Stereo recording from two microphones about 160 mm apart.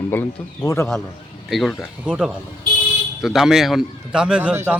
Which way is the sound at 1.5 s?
Centre (ahead or behind).